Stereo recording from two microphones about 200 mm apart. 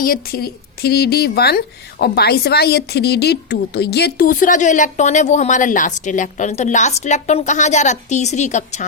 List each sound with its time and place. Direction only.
0.0 s speech: 45° left (ahead or behind)